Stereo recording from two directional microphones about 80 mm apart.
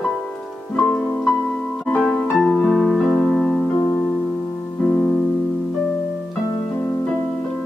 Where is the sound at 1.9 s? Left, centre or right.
Centre.